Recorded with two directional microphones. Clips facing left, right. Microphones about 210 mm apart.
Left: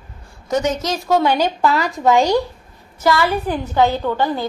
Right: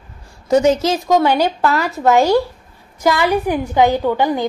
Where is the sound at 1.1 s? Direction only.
10° right (ahead or behind).